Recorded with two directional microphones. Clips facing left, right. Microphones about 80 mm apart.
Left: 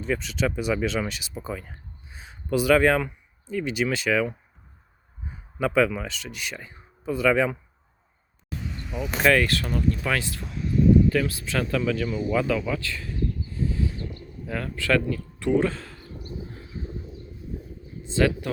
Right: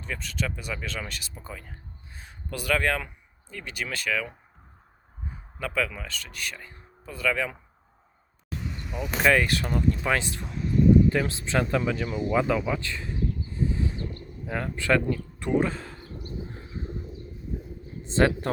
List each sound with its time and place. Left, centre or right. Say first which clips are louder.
0.0 s speech: left 7 dB; centre
5.5 s speech: left 7 dB; centre
8.4 s vehicle: left 1 dB; centre
9.3 s speech: left 1 dB; centre
10.4 s a sound: even; centre
11.1 s speech: left 1 dB; right
11.9 s a sound: left 2 dB; centre
14.4 s speech: even; centre
15.4 s a sound: left 3 dB; centre
18.1 s speech: even; right